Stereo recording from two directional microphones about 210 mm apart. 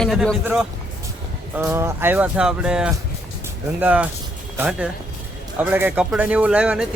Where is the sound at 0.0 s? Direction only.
Centre (ahead or behind).